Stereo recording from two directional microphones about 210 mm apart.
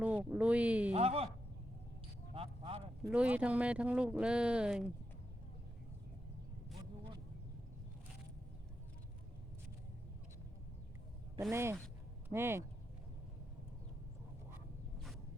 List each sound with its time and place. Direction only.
0.0 s speech: 5° right (ahead or behind)
0.9 s speech: 30° right (ahead or behind)
2.3 s speech: 25° right (ahead or behind)
3.0 s speech: 5° right (ahead or behind)
11.5 s speech: 10° right (ahead or behind)